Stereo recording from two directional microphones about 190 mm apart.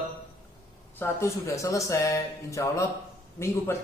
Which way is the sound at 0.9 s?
15° left (ahead or behind).